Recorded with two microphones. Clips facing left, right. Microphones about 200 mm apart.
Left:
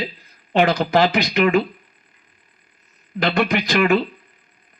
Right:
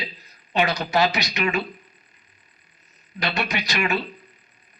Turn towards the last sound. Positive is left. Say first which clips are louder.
# left 8 dB
turn(degrees=55)  # may be behind; listen again after turning